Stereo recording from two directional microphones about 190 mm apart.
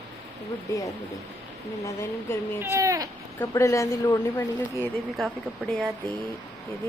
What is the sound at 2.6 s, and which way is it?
Speech, 15° right (ahead or behind).